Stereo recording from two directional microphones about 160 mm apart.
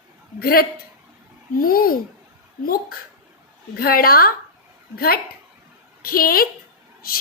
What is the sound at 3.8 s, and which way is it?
A woman's voice, 70° left (ahead or behind).